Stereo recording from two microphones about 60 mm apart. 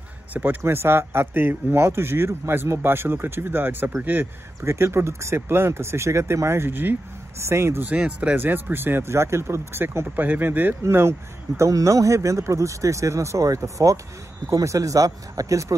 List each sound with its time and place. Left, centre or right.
0.3 s speech: right
4.6 s speech: right
7.3 s speech: right
7.8 s speech: right
8.4 s speech: right
10.8 s speech: right